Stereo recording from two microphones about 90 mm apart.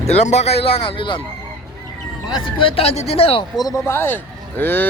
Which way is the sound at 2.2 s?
65° left (ahead or behind).